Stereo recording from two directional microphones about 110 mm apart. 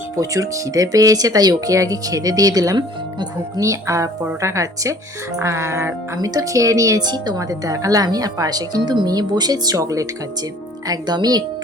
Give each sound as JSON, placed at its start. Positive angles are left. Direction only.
{"t": 0.2, "sound": "speech", "side_deg": -30}